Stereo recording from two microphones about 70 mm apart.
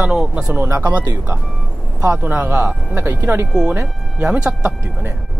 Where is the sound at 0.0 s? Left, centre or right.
Centre.